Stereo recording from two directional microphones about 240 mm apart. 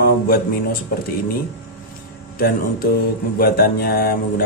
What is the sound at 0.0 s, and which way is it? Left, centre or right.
Speech, left.